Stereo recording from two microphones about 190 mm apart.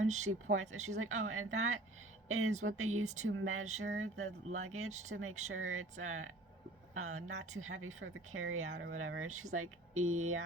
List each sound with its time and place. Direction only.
0.5 s speech: 90° right